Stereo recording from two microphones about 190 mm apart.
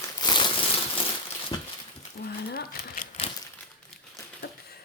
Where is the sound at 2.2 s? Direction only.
45° left (ahead or behind).